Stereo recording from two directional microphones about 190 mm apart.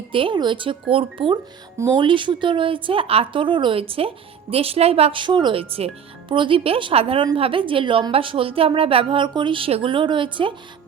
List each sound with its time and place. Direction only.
0.1 s speech: 25° right (ahead or behind)